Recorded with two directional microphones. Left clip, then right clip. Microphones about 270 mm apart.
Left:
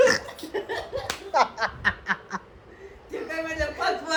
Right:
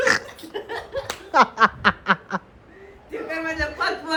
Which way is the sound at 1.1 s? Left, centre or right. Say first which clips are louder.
Even; centre.